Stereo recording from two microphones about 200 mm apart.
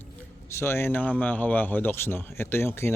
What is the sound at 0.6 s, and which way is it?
Speech, 10° left (ahead or behind).